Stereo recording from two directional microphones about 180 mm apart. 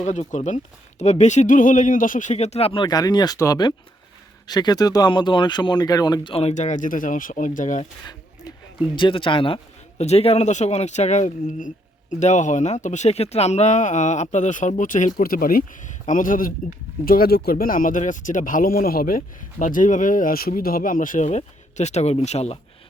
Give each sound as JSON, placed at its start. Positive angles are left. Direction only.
{"t": 0.0, "sound": "speech", "side_deg": 40}
{"t": 9.0, "sound": "speech", "side_deg": 25}